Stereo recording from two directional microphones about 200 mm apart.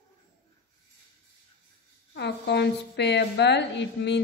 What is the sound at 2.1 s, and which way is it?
A woman's voice, 60° left (ahead or behind).